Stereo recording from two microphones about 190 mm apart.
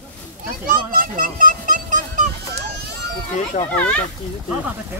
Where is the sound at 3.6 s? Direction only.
35° left (ahead or behind).